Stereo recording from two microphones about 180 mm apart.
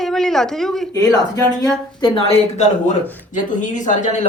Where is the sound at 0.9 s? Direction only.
20° left (ahead or behind).